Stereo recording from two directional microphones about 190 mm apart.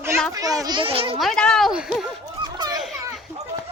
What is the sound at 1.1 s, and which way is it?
Speech, centre (ahead or behind).